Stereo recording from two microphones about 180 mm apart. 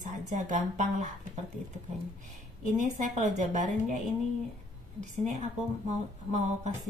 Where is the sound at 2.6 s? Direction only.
45° right (ahead or behind).